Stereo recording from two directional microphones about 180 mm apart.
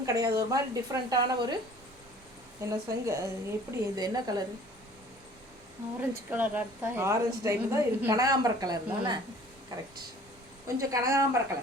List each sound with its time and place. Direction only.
0.0 s a woman's voice: 20° right (ahead or behind)
2.6 s a woman's voice: 15° right (ahead or behind)
6.3 s a woman's voice: 10° right (ahead or behind)